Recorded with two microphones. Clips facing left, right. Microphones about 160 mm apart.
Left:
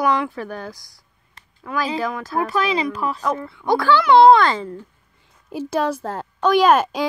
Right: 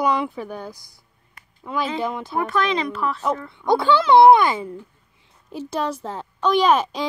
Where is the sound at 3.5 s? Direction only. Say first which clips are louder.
Even; 25° right (ahead or behind).